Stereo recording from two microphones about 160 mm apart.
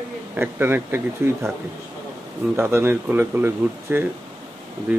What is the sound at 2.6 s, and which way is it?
A man's voice, 15° right (ahead or behind).